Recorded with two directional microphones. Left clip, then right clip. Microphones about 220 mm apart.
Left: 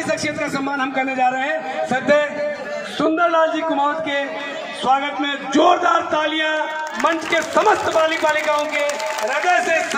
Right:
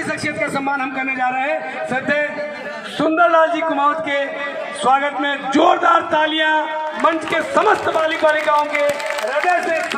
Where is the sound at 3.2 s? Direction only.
25° right (ahead or behind).